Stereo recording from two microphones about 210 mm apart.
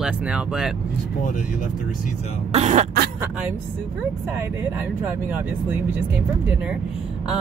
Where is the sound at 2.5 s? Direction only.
30° right (ahead or behind).